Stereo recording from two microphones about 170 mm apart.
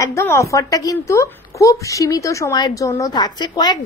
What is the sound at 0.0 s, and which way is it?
Speech, 15° left (ahead or behind).